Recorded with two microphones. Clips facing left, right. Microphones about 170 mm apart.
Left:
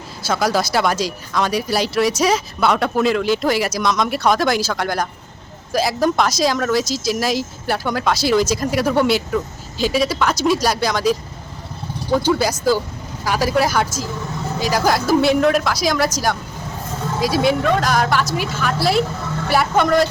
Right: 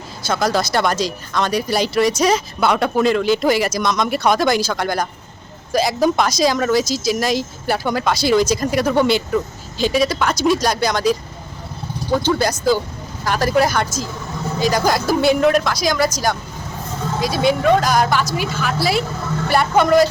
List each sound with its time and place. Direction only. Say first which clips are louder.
0.3 s a woman's voice: even; 5° left (ahead or behind)